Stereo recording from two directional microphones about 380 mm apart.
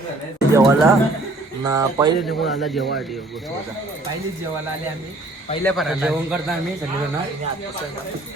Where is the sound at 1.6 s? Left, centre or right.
Centre.